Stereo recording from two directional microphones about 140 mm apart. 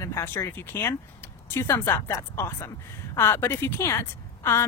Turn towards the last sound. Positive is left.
turn(degrees=20)  # may be behind; listen again after turning